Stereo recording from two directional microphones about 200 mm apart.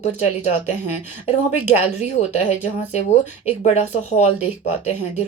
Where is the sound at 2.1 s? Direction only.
35° left (ahead or behind).